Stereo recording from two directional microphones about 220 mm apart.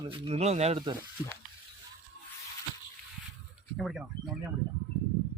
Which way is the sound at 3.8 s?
Centre (ahead or behind).